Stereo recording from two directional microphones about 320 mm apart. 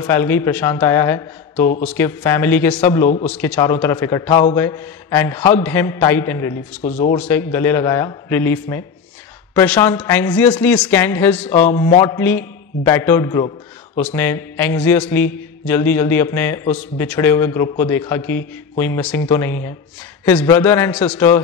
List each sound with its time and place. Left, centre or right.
0.0 s a man's voice: centre
6.8 s speech: left
7.1 s a man's voice: centre